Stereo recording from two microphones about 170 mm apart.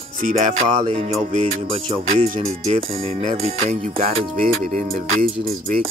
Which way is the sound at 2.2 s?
50° right (ahead or behind).